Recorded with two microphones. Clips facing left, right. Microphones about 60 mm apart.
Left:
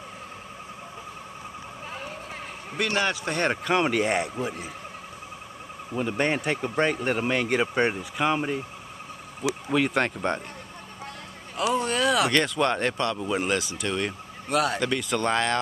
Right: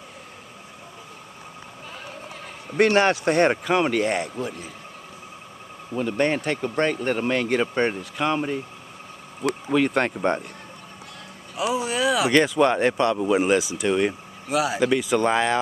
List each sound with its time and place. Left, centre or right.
2.8 s a man's voice: right
3.6 s speech: centre
4.0 s speech: centre
5.9 s speech: centre
9.7 s speech: centre
11.5 s speech: centre
14.5 s speech: centre